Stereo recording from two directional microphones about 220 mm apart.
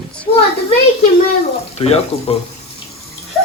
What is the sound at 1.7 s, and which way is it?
Speech, 25° left (ahead or behind).